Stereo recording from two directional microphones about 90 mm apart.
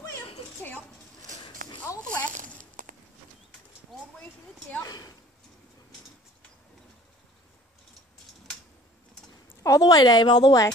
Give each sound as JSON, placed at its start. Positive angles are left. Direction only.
{"t": 2.0, "sound": "zipper", "side_deg": 15}
{"t": 4.8, "sound": "a sound", "side_deg": 45}
{"t": 9.6, "sound": "speech", "side_deg": 40}